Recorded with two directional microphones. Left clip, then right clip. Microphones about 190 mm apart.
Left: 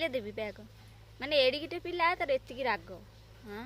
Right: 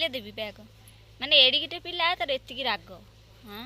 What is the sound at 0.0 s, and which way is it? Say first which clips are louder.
A woman's voice: right 3 dB; 20° left (ahead or behind).